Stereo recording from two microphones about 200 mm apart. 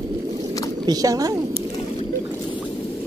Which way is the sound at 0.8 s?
20° right (ahead or behind).